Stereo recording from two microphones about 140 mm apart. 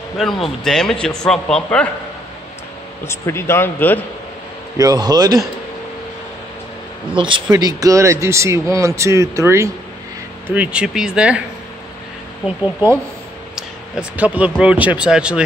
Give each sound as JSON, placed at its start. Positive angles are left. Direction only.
{"t": 0.2, "sound": "a man's voice", "side_deg": 0}
{"t": 3.1, "sound": "a man's voice", "side_deg": 20}
{"t": 4.7, "sound": "speech", "side_deg": -25}
{"t": 7.2, "sound": "speech", "side_deg": -35}
{"t": 10.5, "sound": "speech", "side_deg": -10}
{"t": 13.6, "sound": "speech", "side_deg": -10}